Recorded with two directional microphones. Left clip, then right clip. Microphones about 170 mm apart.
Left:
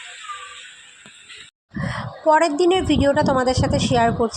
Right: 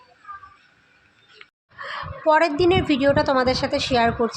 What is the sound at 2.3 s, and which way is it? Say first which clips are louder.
A woman's voice: left 1 dB; 20° left (ahead or behind).